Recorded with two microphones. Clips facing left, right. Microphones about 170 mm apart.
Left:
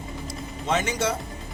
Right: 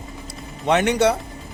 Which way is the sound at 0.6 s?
70° right (ahead or behind).